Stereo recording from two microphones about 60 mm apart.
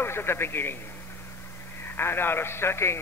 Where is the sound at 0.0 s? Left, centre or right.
Left.